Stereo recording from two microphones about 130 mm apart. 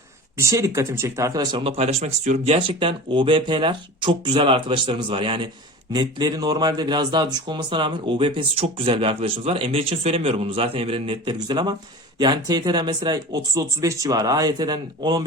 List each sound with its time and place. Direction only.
0.3 s speech: 25° right (ahead or behind)
1.7 s speech: 55° right (ahead or behind); by 15.2 s 35° right (ahead or behind)